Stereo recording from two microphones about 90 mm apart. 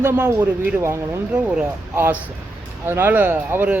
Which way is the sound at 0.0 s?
25° right (ahead or behind).